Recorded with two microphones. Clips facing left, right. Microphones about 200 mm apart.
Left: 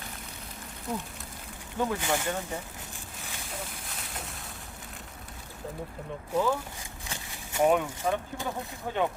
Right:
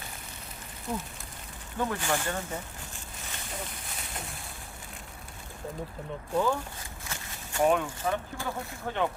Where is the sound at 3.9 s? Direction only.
Centre (ahead or behind).